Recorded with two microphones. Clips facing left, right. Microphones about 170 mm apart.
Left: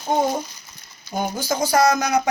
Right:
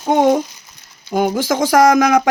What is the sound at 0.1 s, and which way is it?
Speech, 90° right.